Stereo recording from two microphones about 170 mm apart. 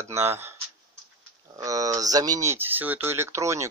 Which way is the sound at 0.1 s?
15° right (ahead or behind).